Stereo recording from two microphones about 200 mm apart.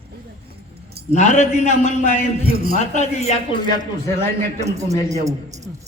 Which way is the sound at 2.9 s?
35° left (ahead or behind).